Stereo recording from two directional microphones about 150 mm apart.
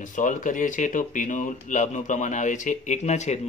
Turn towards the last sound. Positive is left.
turn(degrees=50)  # may be behind; listen again after turning